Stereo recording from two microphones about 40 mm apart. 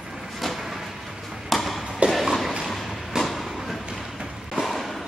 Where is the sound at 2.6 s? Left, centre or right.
Centre.